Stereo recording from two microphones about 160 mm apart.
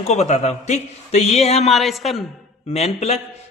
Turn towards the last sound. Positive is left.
turn(degrees=40)  # may be behind; listen again after turning